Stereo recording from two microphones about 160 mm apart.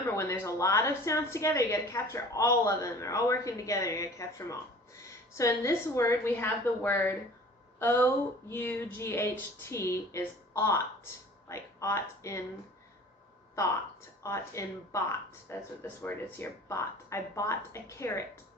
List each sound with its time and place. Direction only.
0.0 s a woman's voice: 20° left (ahead or behind)
14.2 s speech: 20° left (ahead or behind)